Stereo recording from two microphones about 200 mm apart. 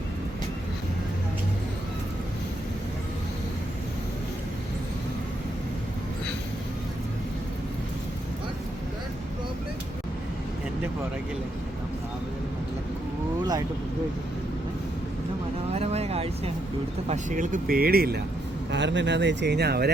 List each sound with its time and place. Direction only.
15.7 s a sound: 30° right (ahead or behind)
17.1 s speech: 40° right (ahead or behind)
18.7 s speech: 60° right (ahead or behind)